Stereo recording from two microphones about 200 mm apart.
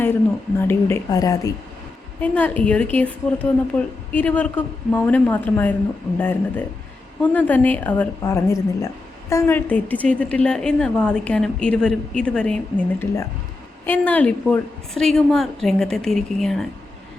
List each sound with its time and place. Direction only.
0.7 s a woman's voice: 10° left (ahead or behind)
2.2 s a woman's voice: 5° left (ahead or behind)